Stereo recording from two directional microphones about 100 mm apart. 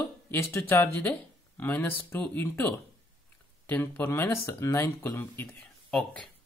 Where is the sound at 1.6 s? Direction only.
20° left (ahead or behind).